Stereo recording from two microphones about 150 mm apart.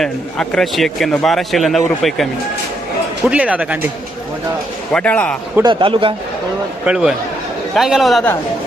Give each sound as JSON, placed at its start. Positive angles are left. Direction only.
{"t": 0.0, "sound": "a man's voice", "side_deg": 5}
{"t": 3.2, "sound": "speech", "side_deg": -10}
{"t": 4.9, "sound": "a man's voice", "side_deg": 5}
{"t": 5.6, "sound": "speech", "side_deg": -35}
{"t": 6.8, "sound": "a man's voice", "side_deg": -5}